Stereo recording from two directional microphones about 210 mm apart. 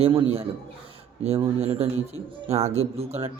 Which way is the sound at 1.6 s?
30° right (ahead or behind).